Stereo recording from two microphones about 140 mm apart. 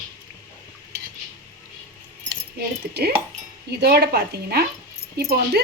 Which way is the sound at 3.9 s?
90° right.